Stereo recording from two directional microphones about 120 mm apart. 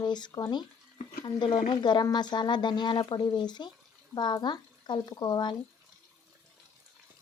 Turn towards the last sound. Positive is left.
turn(degrees=40)  # may be behind; listen again after turning